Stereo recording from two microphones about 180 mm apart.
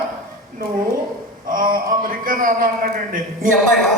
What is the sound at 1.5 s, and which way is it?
A man's voice, 50° right (ahead or behind).